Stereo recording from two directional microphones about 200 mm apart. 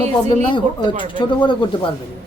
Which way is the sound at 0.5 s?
25° left (ahead or behind).